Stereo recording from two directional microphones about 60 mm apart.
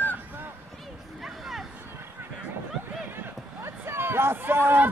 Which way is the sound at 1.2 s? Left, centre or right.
Centre.